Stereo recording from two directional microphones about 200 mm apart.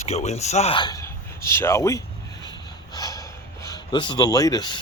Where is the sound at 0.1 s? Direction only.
35° left (ahead or behind); by 2.0 s 15° left (ahead or behind).